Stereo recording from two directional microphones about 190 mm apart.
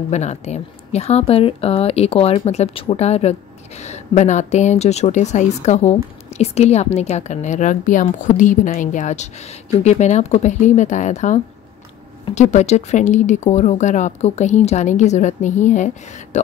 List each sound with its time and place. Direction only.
0.1 s speech: 35° left (ahead or behind)